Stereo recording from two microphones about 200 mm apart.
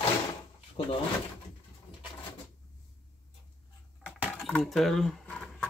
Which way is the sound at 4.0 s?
5° left (ahead or behind).